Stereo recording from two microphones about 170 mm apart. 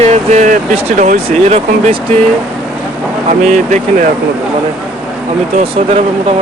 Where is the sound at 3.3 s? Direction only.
45° right (ahead or behind).